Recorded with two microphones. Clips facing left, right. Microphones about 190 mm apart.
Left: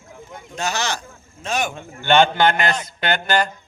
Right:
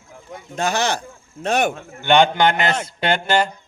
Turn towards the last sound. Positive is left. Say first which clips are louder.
# right 2 dB
turn(degrees=-25)  # may be behind; listen again after turning